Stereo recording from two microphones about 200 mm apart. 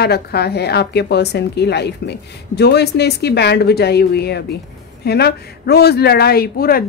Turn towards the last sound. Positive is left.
turn(degrees=50)  # may be behind; listen again after turning